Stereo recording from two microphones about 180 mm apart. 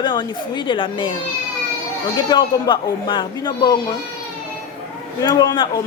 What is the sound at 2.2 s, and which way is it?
Speech, 25° left (ahead or behind).